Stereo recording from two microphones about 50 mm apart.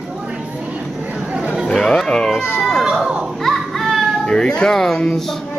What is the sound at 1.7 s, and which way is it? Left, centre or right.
Speech, centre.